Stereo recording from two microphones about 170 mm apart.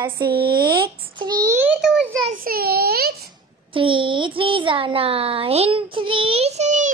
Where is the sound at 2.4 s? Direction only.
65° right (ahead or behind).